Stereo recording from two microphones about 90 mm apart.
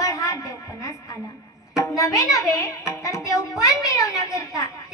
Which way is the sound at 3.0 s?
35° left (ahead or behind).